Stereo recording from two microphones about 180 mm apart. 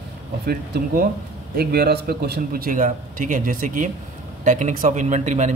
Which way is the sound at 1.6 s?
60° right (ahead or behind).